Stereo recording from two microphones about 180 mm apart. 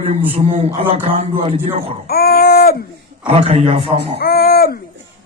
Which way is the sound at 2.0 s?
60° left (ahead or behind).